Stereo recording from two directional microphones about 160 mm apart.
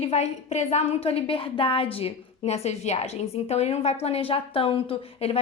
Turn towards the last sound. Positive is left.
turn(degrees=35)  # may be behind; listen again after turning